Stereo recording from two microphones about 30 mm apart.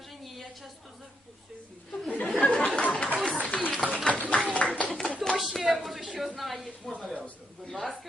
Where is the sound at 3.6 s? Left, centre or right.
Right.